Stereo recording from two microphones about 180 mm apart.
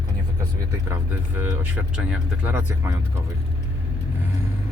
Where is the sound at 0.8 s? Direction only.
15° right (ahead or behind).